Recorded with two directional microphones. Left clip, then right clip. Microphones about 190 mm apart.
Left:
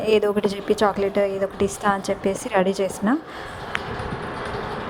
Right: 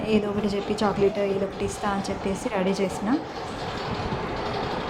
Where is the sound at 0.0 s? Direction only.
45° left (ahead or behind).